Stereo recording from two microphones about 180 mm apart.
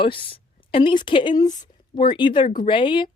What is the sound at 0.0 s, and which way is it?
Speech, 30° left (ahead or behind).